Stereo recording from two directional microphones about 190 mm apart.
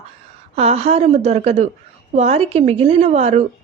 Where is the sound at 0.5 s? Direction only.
35° right (ahead or behind).